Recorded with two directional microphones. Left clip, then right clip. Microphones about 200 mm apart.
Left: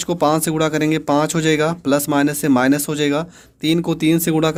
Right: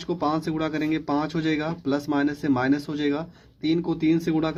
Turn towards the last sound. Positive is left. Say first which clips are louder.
# left 7 dB
turn(degrees=45)  # may be behind; listen again after turning